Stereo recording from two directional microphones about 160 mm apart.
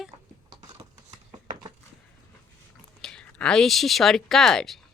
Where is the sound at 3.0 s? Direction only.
5° left (ahead or behind).